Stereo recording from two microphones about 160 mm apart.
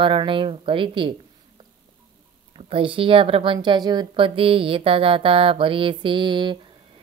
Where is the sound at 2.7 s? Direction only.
35° right (ahead or behind).